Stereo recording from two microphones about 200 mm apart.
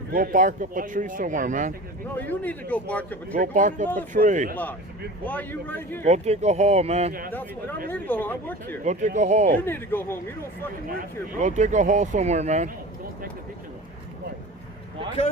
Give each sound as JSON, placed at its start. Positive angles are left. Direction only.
{"t": 0.1, "sound": "speech", "side_deg": -45}
{"t": 2.1, "sound": "a man's voice", "side_deg": 10}
{"t": 3.3, "sound": "speech", "side_deg": -40}
{"t": 5.2, "sound": "a man's voice", "side_deg": 10}
{"t": 6.1, "sound": "speech", "side_deg": -35}
{"t": 7.9, "sound": "a man's voice", "side_deg": 10}
{"t": 8.8, "sound": "speech", "side_deg": -35}
{"t": 9.6, "sound": "a man's voice", "side_deg": 10}
{"t": 10.8, "sound": "speech", "side_deg": -40}